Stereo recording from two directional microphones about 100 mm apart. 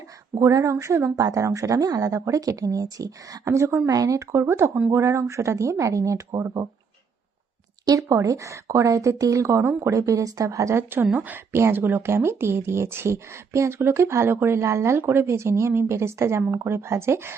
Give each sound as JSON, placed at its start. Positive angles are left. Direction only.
{"t": 0.3, "sound": "speech", "side_deg": -35}
{"t": 7.9, "sound": "speech", "side_deg": -30}